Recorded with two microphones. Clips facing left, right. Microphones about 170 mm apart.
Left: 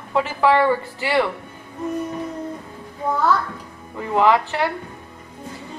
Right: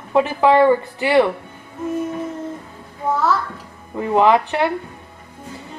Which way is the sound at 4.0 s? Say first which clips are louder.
Right 3 dB; 20° right (ahead or behind).